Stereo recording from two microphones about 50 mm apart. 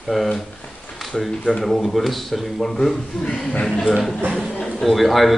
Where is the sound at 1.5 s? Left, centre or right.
Centre.